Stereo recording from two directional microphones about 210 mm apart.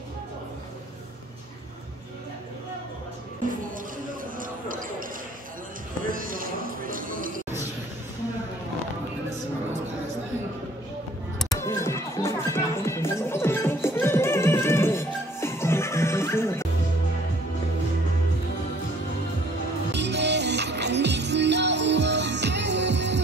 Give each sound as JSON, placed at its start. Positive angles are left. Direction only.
{"t": 4.4, "sound": "basketball bounce", "side_deg": -40}
{"t": 6.0, "sound": "music", "side_deg": -40}
{"t": 11.5, "sound": "music", "side_deg": 15}
{"t": 19.9, "sound": "music", "side_deg": -55}